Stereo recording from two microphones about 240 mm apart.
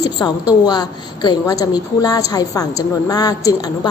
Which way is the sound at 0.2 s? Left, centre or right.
Centre.